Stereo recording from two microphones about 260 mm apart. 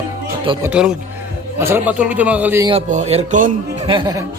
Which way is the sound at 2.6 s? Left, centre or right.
Right.